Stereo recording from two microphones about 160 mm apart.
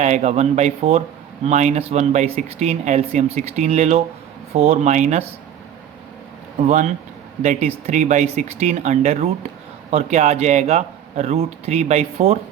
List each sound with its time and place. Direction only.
0.0 s speech: 45° right (ahead or behind)
6.7 s speech: 45° right (ahead or behind)